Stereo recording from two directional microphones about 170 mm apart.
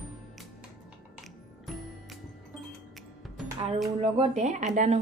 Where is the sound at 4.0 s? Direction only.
35° right (ahead or behind).